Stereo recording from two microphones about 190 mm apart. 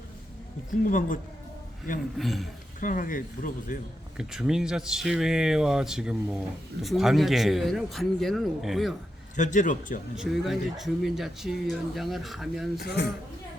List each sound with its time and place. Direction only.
0.9 s speech: 45° left (ahead or behind)
2.1 s speech: centre (ahead or behind)
2.8 s speech: 45° left (ahead or behind)
4.2 s speech: 5° right (ahead or behind)
9.3 s a man's voice: 40° left (ahead or behind)
10.2 s speech: centre (ahead or behind)
12.8 s speech: 60° left (ahead or behind)